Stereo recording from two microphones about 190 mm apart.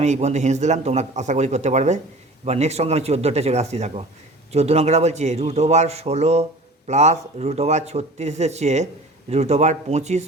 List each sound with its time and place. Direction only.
0.0 s speech: 35° right (ahead or behind)